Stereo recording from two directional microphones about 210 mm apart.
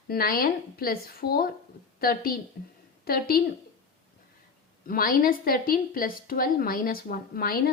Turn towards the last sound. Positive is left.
turn(degrees=45)  # may be behind; listen again after turning